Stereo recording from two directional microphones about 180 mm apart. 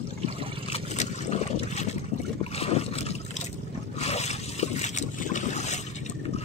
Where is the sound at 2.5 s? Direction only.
35° left (ahead or behind).